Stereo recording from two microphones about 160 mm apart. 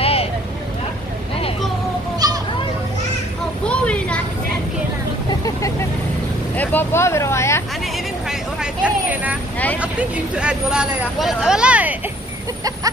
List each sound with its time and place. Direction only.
0.0 s vehicle: 40° left (ahead or behind)
3.6 s a sound: 10° left (ahead or behind)
5.4 s vehicle: 20° left (ahead or behind)
7.8 s vehicle: 5° right (ahead or behind)
9.8 s speech: 10° right (ahead or behind)